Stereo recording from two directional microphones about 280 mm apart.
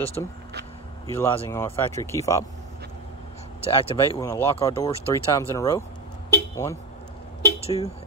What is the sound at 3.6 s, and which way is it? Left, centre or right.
Speech, centre.